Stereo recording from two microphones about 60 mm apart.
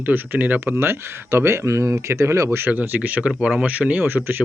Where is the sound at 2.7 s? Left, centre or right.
Right.